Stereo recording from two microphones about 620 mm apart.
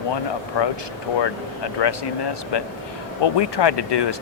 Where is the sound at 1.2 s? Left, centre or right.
Left.